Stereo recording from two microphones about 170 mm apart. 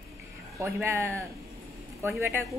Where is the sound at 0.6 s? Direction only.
15° right (ahead or behind).